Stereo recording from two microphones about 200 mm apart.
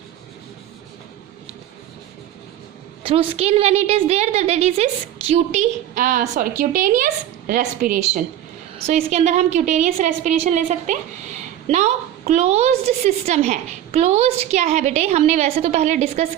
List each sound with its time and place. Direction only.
3.0 s a woman's voice: 30° right (ahead or behind)